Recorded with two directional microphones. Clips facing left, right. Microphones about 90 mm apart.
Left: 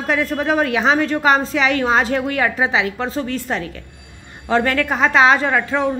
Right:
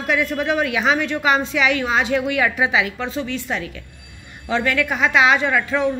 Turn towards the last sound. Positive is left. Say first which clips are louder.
# left 1 dB
turn(degrees=35)  # may be behind; listen again after turning